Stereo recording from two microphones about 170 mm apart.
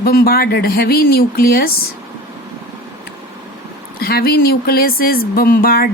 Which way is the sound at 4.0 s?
65° left (ahead or behind).